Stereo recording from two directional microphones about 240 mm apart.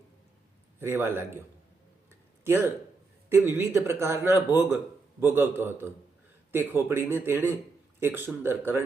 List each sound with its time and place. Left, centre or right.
0.8 s a man's voice: centre
2.4 s a man's voice: centre